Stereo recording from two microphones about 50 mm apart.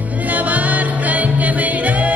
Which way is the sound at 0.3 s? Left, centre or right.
Right.